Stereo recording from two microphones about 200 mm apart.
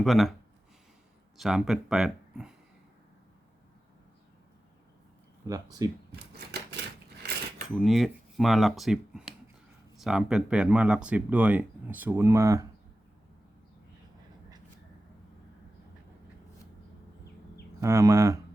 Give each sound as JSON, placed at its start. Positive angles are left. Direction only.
{"t": 0.0, "sound": "speech", "side_deg": 0}
{"t": 1.4, "sound": "speech", "side_deg": 0}
{"t": 5.5, "sound": "speech", "side_deg": -20}
{"t": 6.1, "sound": "typewriter", "side_deg": -55}
{"t": 7.8, "sound": "speech", "side_deg": 0}
{"t": 17.7, "sound": "speech", "side_deg": -15}